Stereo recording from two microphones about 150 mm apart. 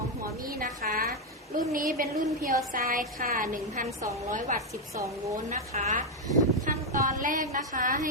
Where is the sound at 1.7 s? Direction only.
70° right (ahead or behind).